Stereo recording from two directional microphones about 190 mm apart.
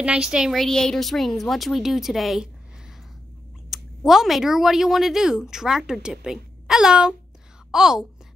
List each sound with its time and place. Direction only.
0.0 s speech: 5° right (ahead or behind)
3.7 s speech: centre (ahead or behind)